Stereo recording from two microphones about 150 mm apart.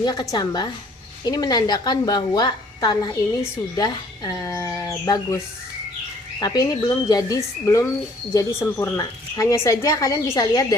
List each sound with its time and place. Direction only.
0.0 s speech: 25° left (ahead or behind)
6.4 s speech: 25° left (ahead or behind)